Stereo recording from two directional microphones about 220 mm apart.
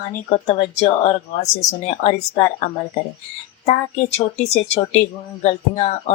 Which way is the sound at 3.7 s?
30° left (ahead or behind).